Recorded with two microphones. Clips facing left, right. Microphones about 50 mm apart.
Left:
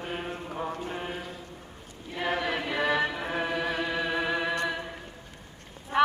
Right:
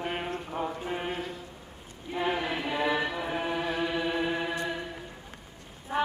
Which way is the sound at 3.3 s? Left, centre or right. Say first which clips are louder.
Left 1 dB; left.